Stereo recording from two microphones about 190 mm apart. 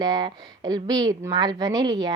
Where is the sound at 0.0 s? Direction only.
20° right (ahead or behind).